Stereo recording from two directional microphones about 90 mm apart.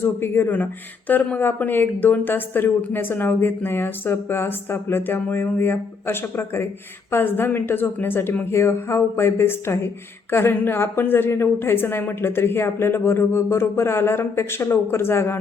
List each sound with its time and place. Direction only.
0.0 s speech: 25° left (ahead or behind)